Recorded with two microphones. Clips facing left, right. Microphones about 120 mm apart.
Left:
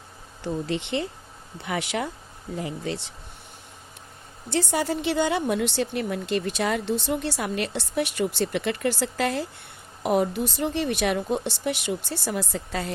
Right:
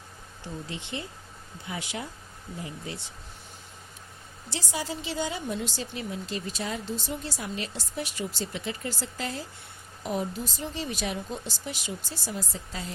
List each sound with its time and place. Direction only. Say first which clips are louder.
0.4 s speech: left 10 dB; 75° left (ahead or behind)
4.4 s speech: left 9 dB; 60° left (ahead or behind)